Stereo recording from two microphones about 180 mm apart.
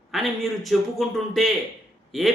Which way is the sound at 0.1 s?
Centre (ahead or behind).